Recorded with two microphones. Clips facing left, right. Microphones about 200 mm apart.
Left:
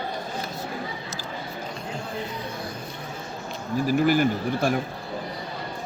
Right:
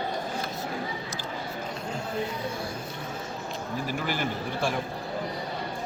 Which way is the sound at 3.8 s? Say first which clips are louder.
Left 11 dB; 45° left (ahead or behind).